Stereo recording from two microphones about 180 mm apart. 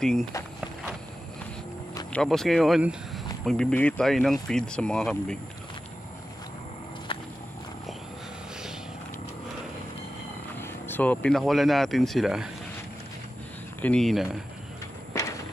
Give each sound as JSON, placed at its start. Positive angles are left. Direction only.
{"t": 0.0, "sound": "speech", "side_deg": 5}
{"t": 2.1, "sound": "speech", "side_deg": 0}
{"t": 7.1, "sound": "walk", "side_deg": 30}
{"t": 10.5, "sound": "speech", "side_deg": 10}
{"t": 13.7, "sound": "speech", "side_deg": 5}